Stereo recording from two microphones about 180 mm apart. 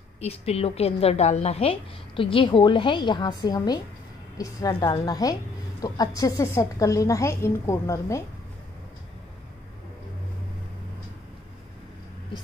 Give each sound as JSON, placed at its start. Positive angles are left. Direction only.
{"t": 0.2, "sound": "a woman's voice", "side_deg": 35}